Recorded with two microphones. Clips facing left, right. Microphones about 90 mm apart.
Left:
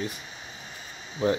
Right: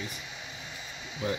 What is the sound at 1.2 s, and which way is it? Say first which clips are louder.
Speech: left 7 dB; 35° left (ahead or behind).